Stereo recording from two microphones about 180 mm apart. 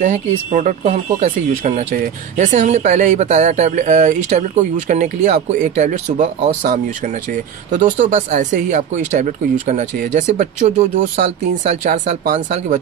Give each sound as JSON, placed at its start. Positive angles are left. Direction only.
{"t": 0.0, "sound": "speech", "side_deg": -40}
{"t": 7.7, "sound": "speech", "side_deg": -45}